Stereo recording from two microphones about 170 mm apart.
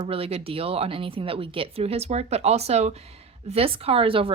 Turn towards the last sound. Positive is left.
turn(degrees=-30)  # may be behind; listen again after turning